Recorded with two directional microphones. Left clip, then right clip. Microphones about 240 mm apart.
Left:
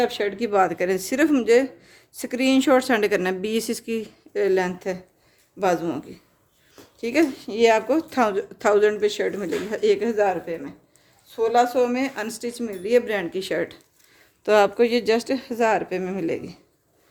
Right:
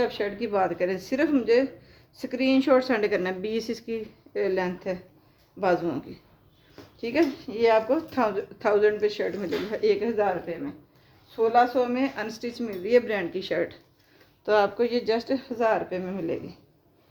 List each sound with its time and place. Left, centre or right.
0.0 s a woman's voice: left